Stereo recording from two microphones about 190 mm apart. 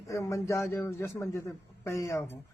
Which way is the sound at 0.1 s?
15° left (ahead or behind).